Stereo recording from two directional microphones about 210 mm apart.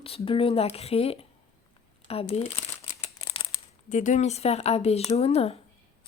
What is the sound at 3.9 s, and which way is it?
Speech, 35° left (ahead or behind).